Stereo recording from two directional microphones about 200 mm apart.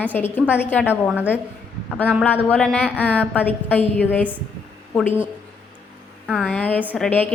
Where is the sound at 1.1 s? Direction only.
5° right (ahead or behind).